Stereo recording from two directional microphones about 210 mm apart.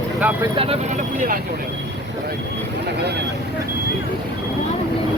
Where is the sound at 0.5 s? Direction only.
30° right (ahead or behind).